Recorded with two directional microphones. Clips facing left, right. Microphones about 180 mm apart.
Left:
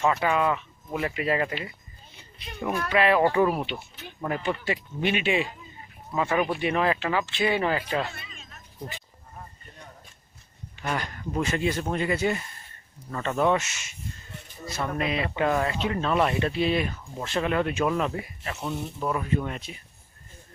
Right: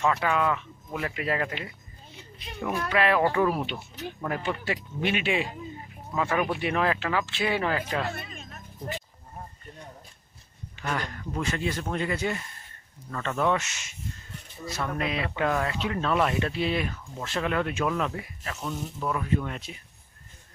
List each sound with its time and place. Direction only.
0.0 s speech: 5° left (ahead or behind)
2.9 s speech: 5° left (ahead or behind)
8.1 s speech: 50° right (ahead or behind)
10.9 s speech: 10° left (ahead or behind)